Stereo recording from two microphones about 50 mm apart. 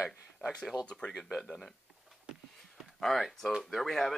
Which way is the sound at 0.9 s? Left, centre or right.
Centre.